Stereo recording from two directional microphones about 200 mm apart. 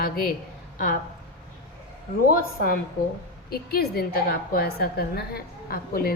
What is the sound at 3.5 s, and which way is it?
A woman's voice, 50° left (ahead or behind).